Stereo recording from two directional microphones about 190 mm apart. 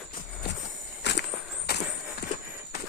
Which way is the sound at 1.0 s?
65° left (ahead or behind).